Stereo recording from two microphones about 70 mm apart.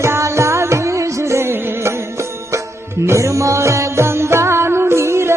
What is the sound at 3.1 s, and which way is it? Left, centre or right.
Music, right.